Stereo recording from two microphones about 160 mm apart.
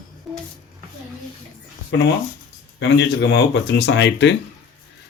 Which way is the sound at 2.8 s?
90° left.